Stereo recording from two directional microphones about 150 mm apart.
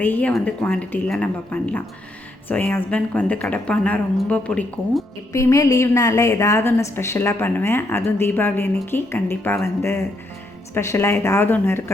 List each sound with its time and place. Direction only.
0.0 s a woman's voice: 10° left (ahead or behind)
5.3 s a woman's voice: 20° left (ahead or behind)